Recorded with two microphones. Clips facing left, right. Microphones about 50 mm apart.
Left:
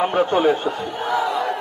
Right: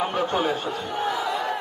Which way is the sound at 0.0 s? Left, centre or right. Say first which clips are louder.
Left 6 dB; left.